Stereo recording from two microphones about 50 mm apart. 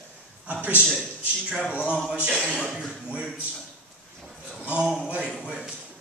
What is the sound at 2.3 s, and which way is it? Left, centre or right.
Speech, centre.